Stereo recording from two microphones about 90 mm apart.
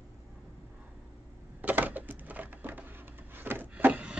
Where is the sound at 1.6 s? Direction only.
20° right (ahead or behind).